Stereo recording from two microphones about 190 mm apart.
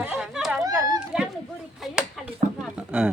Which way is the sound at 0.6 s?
20° right (ahead or behind).